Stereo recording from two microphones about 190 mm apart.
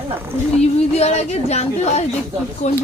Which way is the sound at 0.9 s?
35° left (ahead or behind).